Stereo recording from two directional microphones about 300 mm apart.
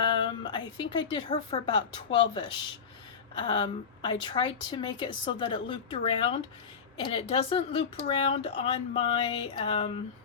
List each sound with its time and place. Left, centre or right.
0.0 s speech: centre